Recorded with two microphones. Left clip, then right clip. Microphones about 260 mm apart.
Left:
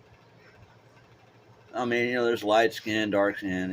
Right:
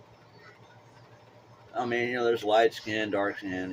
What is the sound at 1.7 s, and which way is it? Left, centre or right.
Speech, left.